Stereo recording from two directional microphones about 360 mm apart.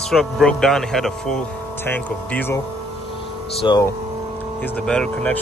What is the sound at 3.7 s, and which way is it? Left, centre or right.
Speech, centre.